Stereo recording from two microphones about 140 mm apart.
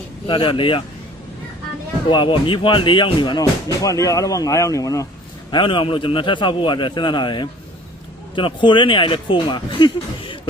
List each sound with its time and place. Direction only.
0.3 s speech: 35° left (ahead or behind)
2.0 s speech: 35° left (ahead or behind)
5.5 s speech: 35° left (ahead or behind)